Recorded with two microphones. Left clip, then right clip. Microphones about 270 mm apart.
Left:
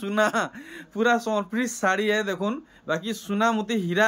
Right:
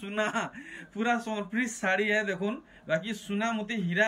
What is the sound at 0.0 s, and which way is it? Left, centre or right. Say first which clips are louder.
A man's voice: left 7 dB; left.